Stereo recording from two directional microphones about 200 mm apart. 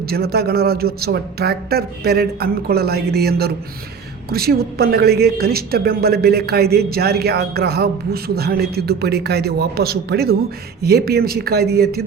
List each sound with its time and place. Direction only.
0.0 s a woman's voice: 50° right (ahead or behind)